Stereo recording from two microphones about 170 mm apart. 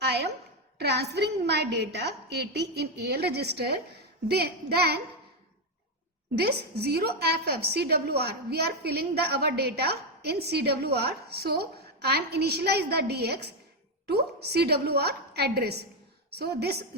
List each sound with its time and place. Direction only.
0.0 s a sound: 75° right (ahead or behind)
0.8 s a woman's voice: 75° right (ahead or behind)
6.3 s a woman's voice: 70° right (ahead or behind)